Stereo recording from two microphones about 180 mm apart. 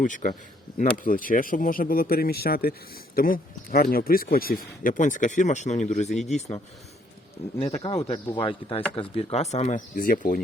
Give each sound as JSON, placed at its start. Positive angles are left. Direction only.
{"t": 0.0, "sound": "speech", "side_deg": 45}
{"t": 6.1, "sound": "speech", "side_deg": 0}
{"t": 8.0, "sound": "speech", "side_deg": 30}